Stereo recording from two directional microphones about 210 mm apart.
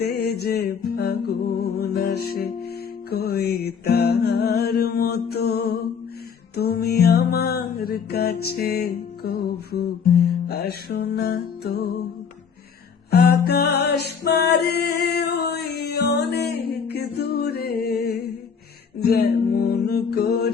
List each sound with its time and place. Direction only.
0.0 s music: 50° left (ahead or behind)
13.1 s music: 50° left (ahead or behind)